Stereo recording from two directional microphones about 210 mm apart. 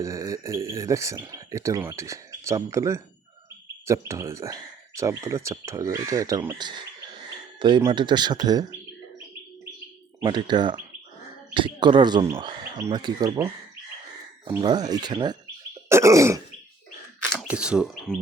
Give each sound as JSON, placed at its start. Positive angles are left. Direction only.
{"t": 0.0, "sound": "speech", "side_deg": -15}
{"t": 10.2, "sound": "speech", "side_deg": -20}
{"t": 15.9, "sound": "throat clearing", "side_deg": -15}
{"t": 17.3, "sound": "speech", "side_deg": -5}